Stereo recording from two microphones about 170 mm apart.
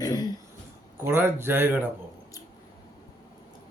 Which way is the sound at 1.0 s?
15° right (ahead or behind).